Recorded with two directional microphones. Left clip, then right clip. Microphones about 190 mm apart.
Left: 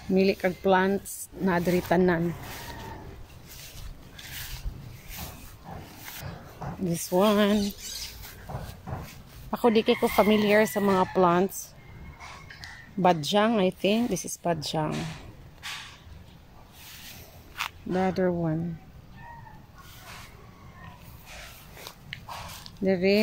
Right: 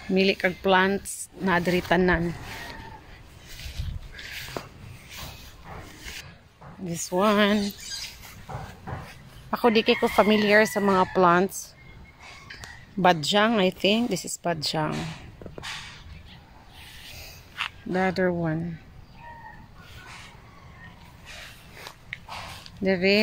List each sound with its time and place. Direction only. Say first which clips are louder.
0.1 s speech: right 2 dB; 5° left (ahead or behind)
6.9 s speech: right 1 dB; centre (ahead or behind)
8.9 s a sound: right 2 dB; 55° left (ahead or behind)
9.5 s speech: right 2 dB; centre (ahead or behind)
17.6 s speech: right 2 dB; 5° left (ahead or behind)
22.1 s biting: right 2 dB; 10° right (ahead or behind)
22.8 s speech: right 2 dB; 5° left (ahead or behind)